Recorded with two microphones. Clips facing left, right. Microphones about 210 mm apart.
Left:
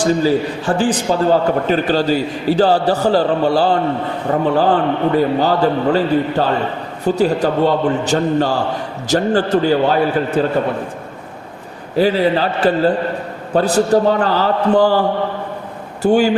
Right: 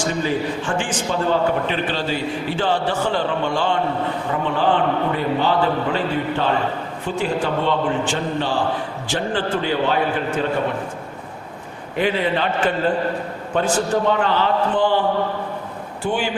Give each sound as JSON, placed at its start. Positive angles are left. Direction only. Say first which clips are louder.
{"t": 0.0, "sound": "a man's voice", "louder": "left 7 dB", "side_deg": 35}
{"t": 11.9, "sound": "a man's voice", "louder": "left 6 dB", "side_deg": 35}
{"t": 16.0, "sound": "speech", "louder": "left 10 dB", "side_deg": 40}